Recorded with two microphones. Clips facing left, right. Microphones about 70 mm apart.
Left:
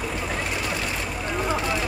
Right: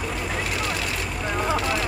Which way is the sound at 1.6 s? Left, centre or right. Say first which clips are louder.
Right 1 dB; left.